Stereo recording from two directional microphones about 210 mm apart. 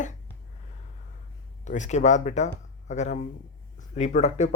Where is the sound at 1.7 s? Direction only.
35° left (ahead or behind).